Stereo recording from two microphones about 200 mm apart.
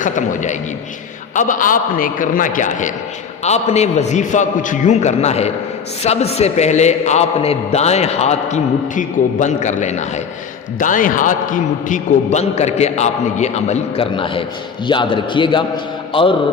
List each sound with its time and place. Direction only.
0.0 s a man's voice: 40° left (ahead or behind)